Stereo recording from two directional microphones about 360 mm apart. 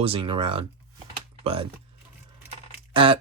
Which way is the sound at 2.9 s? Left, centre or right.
Centre.